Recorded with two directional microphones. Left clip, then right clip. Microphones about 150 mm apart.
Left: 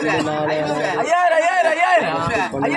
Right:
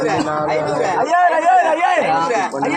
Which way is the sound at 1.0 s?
40° left (ahead or behind).